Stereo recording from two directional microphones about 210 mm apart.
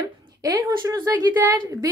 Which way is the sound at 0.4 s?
15° right (ahead or behind).